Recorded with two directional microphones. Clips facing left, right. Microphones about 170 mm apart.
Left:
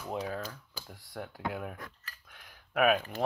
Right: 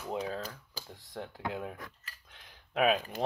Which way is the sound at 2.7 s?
25° right (ahead or behind).